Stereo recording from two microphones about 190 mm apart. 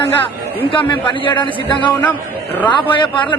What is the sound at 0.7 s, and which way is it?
A man's voice, 25° left (ahead or behind).